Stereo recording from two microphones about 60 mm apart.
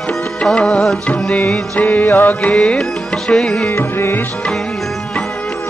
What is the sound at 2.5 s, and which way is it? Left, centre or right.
Music, centre.